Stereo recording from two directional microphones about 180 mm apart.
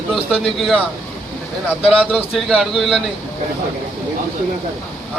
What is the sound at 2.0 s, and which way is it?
A man's voice, 5° right (ahead or behind).